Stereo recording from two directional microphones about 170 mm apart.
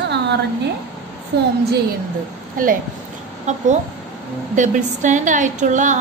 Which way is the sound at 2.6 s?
55° right (ahead or behind).